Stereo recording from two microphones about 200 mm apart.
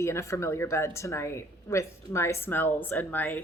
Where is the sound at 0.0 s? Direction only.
15° left (ahead or behind).